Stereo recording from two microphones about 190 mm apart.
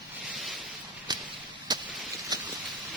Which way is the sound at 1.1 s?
20° right (ahead or behind).